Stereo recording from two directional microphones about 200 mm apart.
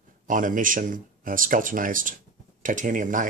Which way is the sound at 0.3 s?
40° right (ahead or behind).